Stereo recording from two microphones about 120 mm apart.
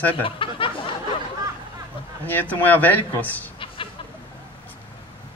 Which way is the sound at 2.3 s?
15° left (ahead or behind).